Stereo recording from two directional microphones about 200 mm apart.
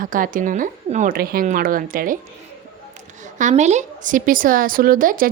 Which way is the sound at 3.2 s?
40° right (ahead or behind).